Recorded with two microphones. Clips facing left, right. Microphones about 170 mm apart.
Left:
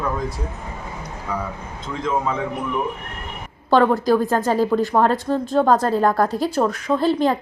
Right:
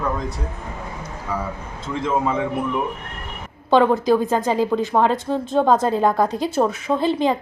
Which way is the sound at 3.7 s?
Centre (ahead or behind).